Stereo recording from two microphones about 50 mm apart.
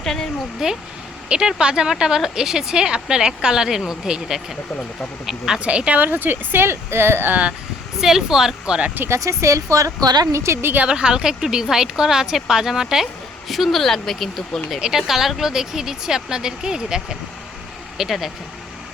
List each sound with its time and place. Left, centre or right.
0.0 s speech: centre
0.6 s speech: centre
5.5 s speech: right
6.0 s speech: right
8.0 s speech: centre
9.0 s speech: right
10.3 s a woman's voice: right
10.8 s speech: centre
13.5 s speech: centre
14.8 s speech: centre